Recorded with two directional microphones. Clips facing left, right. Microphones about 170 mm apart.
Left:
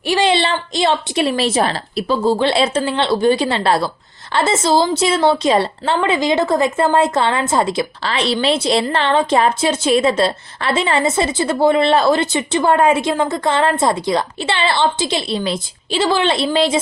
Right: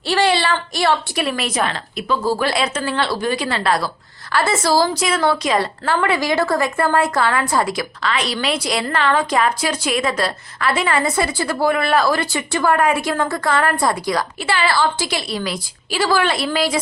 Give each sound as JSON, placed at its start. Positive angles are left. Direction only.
{"t": 0.1, "sound": "a woman's voice", "side_deg": 20}